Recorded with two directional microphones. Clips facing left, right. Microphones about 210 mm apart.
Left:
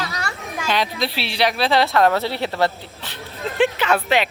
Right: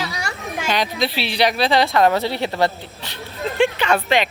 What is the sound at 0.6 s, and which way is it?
Speech, centre (ahead or behind).